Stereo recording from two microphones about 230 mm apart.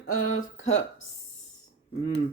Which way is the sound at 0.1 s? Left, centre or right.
Left.